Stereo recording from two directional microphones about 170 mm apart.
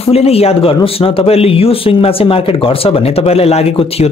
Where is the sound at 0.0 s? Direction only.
35° left (ahead or behind).